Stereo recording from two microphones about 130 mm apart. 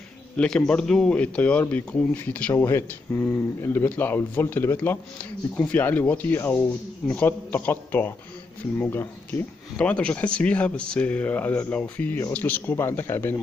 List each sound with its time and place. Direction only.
0.4 s speech: 10° left (ahead or behind)